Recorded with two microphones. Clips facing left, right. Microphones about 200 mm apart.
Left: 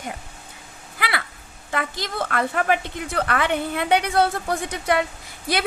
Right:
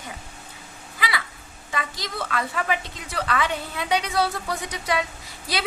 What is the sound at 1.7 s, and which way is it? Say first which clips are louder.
A woman's voice: left 4 dB; 55° left (ahead or behind).